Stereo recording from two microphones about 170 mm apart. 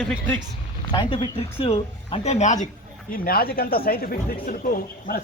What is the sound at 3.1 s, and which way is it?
Speech, 60° left (ahead or behind).